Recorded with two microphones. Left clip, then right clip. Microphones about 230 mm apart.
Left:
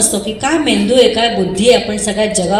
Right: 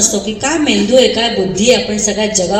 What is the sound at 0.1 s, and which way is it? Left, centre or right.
A woman's voice, left.